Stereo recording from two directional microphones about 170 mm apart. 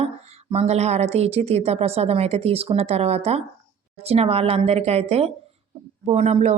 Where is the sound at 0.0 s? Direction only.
40° right (ahead or behind).